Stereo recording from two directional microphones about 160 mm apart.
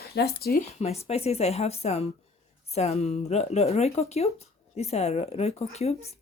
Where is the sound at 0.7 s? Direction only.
40° left (ahead or behind).